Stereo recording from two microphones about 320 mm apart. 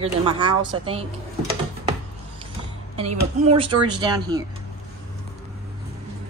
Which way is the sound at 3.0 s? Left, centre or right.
Centre.